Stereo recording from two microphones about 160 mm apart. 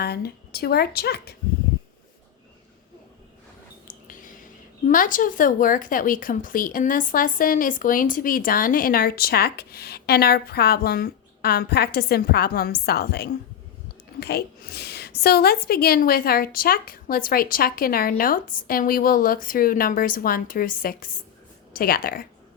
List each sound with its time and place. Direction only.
0.0 s speech: 80° left
3.8 s a sound: 55° left (ahead or behind)
4.9 s speech: 55° left (ahead or behind)